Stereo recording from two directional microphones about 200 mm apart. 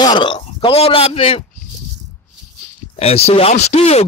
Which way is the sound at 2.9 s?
30° left (ahead or behind).